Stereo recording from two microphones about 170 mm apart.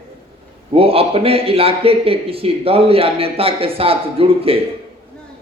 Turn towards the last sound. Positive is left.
turn(degrees=-35)  # may be behind; listen again after turning